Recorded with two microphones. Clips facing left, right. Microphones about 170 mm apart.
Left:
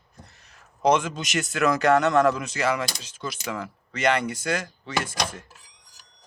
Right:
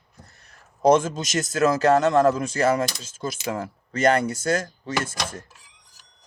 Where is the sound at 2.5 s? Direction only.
50° right (ahead or behind).